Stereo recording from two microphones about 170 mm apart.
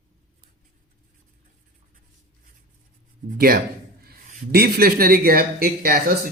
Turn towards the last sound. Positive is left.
turn(degrees=-65)  # may be behind; listen again after turning